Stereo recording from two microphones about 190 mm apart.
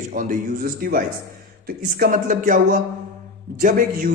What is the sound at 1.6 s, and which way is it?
Speech, 50° right (ahead or behind).